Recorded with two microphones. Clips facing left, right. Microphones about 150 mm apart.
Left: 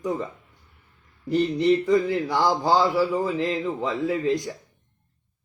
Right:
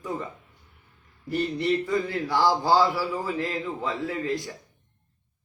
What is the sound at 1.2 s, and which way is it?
Speech, 20° left (ahead or behind).